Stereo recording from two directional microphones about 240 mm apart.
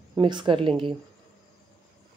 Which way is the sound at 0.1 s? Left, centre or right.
Centre.